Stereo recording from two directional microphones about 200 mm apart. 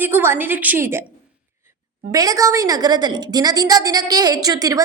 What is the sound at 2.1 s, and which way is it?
A woman's voice, 15° right (ahead or behind).